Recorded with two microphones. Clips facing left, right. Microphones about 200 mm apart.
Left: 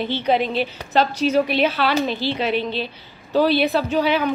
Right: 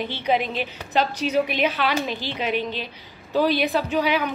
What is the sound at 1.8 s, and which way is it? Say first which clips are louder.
A woman's voice: left 4 dB; 35° left (ahead or behind).